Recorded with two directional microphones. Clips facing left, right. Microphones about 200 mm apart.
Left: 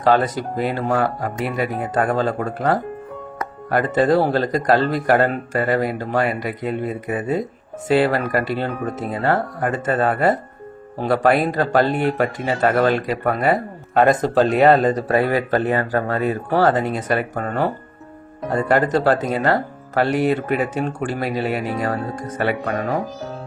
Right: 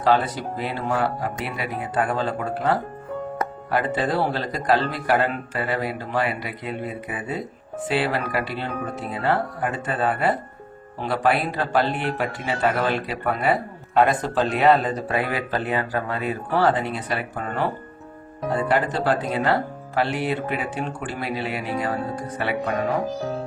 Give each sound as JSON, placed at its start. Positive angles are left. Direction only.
{"t": 0.0, "sound": "speech", "side_deg": 45}